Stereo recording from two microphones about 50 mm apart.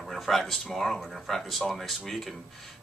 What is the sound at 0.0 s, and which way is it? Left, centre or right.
Speech, centre.